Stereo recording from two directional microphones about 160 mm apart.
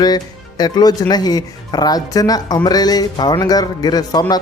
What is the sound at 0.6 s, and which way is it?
Speech, 25° left (ahead or behind).